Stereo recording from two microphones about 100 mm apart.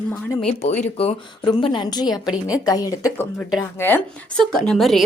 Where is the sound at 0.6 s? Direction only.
90° left.